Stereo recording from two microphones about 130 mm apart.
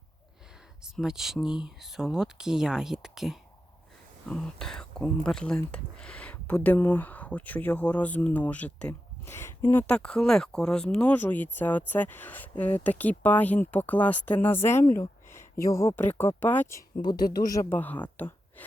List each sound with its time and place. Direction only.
0.8 s speech: 5° right (ahead or behind); by 14.8 s 20° left (ahead or behind)
14.9 s a sound: 20° left (ahead or behind)
16.0 s speech: 15° left (ahead or behind)
17.0 s speech: 30° left (ahead or behind)
17.7 s speech: 15° left (ahead or behind)
18.2 s a sound: 15° left (ahead or behind)